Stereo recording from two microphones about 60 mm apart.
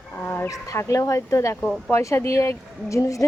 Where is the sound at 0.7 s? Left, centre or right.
Left.